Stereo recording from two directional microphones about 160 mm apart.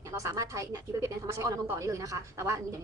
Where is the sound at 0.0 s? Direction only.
20° right (ahead or behind).